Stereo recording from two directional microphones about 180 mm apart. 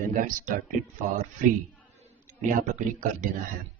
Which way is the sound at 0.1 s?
50° right (ahead or behind).